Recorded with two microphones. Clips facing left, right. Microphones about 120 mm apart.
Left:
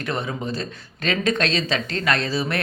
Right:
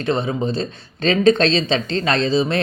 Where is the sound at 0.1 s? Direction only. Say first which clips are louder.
Right 7 dB; 25° right (ahead or behind).